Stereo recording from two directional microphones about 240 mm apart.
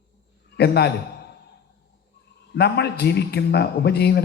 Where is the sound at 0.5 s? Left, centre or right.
Left.